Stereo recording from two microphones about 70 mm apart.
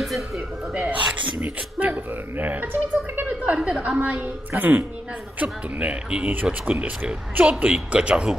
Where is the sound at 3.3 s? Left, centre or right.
Centre.